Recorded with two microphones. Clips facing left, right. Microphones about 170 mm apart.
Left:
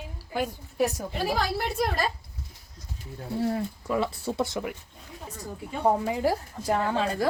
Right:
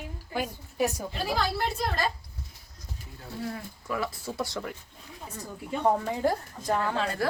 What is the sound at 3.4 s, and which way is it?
Speech, 30° left (ahead or behind).